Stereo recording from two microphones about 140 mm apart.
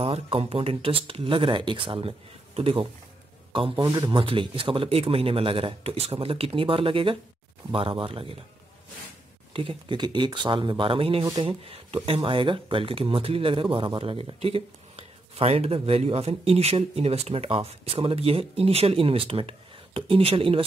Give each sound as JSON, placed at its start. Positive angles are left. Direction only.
{"t": 0.0, "sound": "speech", "side_deg": -45}
{"t": 9.5, "sound": "speech", "side_deg": -40}